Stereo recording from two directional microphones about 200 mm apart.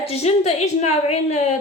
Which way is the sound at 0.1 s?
30° left (ahead or behind).